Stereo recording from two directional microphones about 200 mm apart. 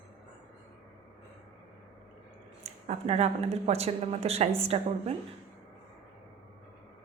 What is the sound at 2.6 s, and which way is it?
Speech, 30° right (ahead or behind).